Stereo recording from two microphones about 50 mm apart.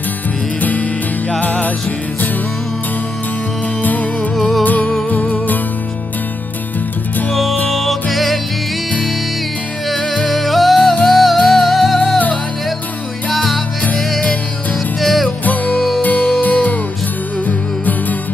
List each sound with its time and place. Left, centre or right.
0.6 s music: left
3.8 s music: left
4.4 s music: centre
5.1 s music: left
7.7 s music: centre
10.2 s music: centre
13.3 s music: centre
15.0 s music: centre
16.0 s music: left